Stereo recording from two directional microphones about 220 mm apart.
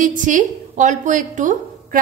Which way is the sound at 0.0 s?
35° right (ahead or behind).